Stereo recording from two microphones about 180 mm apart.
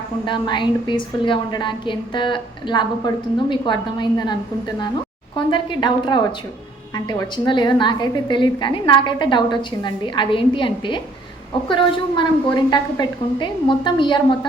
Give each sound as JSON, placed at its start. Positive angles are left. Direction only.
{"t": 0.3, "sound": "a woman's voice", "side_deg": 25}